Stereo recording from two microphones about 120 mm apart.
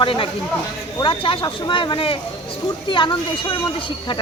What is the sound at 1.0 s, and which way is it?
Speech, 45° left (ahead or behind).